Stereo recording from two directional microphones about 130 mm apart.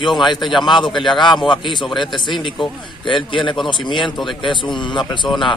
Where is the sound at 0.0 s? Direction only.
35° left (ahead or behind).